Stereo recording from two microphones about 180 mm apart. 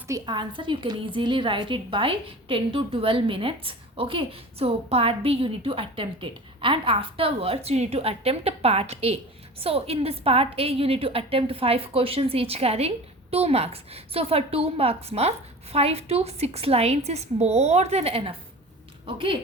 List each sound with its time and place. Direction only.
0.1 s a woman's voice: 25° right (ahead or behind)